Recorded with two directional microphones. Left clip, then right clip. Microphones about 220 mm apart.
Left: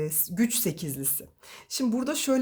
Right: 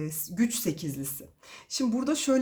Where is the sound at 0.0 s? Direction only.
35° left (ahead or behind).